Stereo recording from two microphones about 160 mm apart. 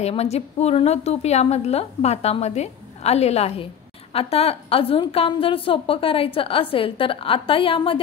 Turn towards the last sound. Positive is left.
turn(degrees=35)  # may be behind; listen again after turning